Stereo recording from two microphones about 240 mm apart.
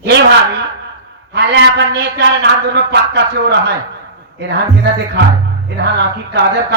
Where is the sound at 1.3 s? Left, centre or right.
Right.